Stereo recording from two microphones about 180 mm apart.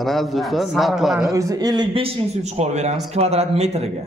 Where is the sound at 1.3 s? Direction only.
20° right (ahead or behind); by 3.9 s 35° right (ahead or behind).